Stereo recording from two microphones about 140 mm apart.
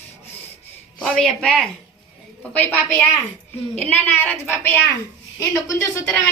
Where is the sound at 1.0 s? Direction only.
5° left (ahead or behind).